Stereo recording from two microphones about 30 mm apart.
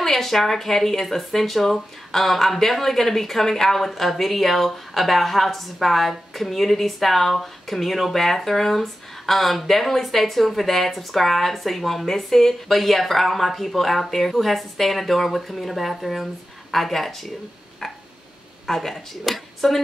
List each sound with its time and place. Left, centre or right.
0.0 s speech: centre
18.7 s speech: centre